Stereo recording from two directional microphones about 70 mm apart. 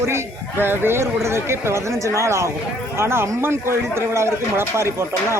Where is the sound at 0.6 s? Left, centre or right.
Right.